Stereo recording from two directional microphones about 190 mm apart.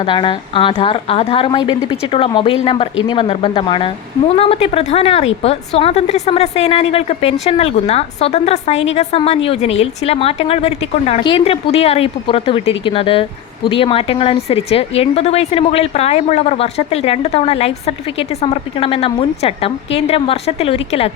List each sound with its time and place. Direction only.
0.1 s a woman's voice: 25° left (ahead or behind)